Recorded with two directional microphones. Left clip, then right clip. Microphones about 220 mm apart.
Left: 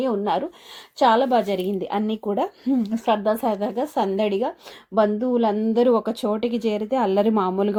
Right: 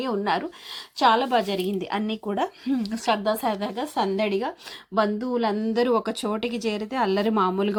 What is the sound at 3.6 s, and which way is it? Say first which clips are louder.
Speech: left 3 dB; 55° right (ahead or behind).